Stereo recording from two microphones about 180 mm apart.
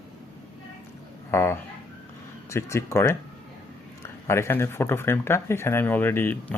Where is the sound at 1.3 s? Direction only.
15° left (ahead or behind).